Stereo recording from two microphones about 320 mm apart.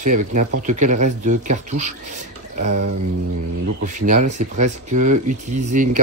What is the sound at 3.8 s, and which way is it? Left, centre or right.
Speech, right.